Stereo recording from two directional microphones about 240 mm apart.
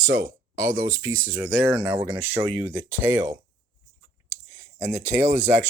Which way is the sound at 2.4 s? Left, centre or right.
Right.